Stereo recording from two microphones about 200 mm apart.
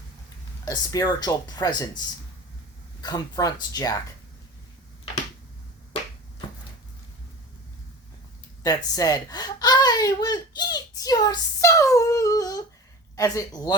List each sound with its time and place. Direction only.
0.6 s speech: 20° left (ahead or behind)
3.0 s speech: 20° left (ahead or behind)
8.6 s speech: 20° left (ahead or behind)